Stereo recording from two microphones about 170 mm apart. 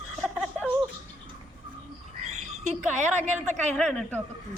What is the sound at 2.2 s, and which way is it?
Bird, 40° right (ahead or behind).